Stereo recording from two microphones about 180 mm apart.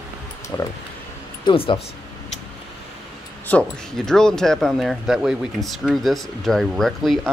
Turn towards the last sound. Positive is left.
turn(degrees=0)  # may be behind; listen again after turning